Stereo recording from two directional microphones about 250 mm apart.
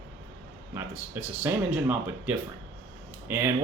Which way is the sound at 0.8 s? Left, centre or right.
Centre.